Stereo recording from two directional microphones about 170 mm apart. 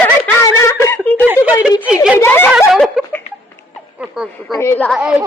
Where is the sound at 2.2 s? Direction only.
15° left (ahead or behind).